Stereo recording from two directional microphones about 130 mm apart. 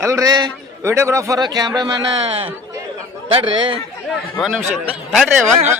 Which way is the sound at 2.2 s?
50° right (ahead or behind).